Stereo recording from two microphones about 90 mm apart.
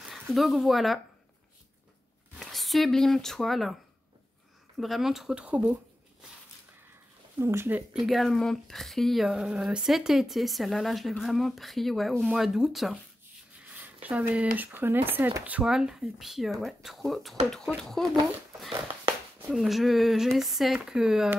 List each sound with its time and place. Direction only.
0.0 s speech: centre (ahead or behind)
2.3 s speech: centre (ahead or behind)
4.7 s speech: centre (ahead or behind)
5.4 s speech: 15° right (ahead or behind)
7.3 s speech: 25° right (ahead or behind)
7.9 s speech: centre (ahead or behind)
13.7 s speech: 15° right (ahead or behind)
15.4 s speech: 10° right (ahead or behind)
19.5 s speech: centre (ahead or behind)